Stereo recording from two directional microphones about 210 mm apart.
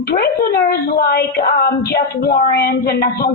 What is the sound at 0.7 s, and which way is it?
A woman's voice, 45° left (ahead or behind).